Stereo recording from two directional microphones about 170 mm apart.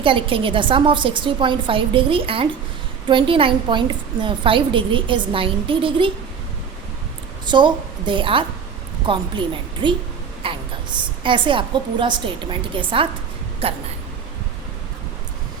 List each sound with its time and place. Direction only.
0.0 s a woman's voice: 30° right (ahead or behind)
7.4 s a woman's voice: 25° right (ahead or behind)
10.4 s a sound: 30° right (ahead or behind)
11.2 s a woman's voice: 30° right (ahead or behind)